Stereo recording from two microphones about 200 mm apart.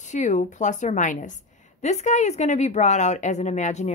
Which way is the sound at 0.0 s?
35° left (ahead or behind).